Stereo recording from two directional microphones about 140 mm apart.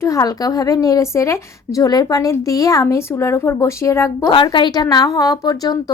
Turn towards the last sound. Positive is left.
turn(degrees=30)  # may be behind; listen again after turning